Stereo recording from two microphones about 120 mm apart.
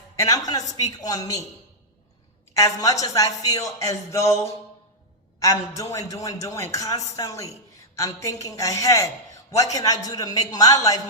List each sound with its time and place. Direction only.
0.2 s speech: 30° left (ahead or behind)
2.6 s a man's voice: 30° left (ahead or behind)